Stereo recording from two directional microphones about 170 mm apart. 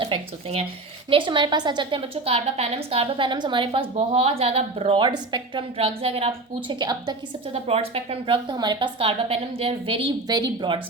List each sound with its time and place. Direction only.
0.0 s a woman's voice: 35° right (ahead or behind)
7.7 s a woman's voice: 35° right (ahead or behind)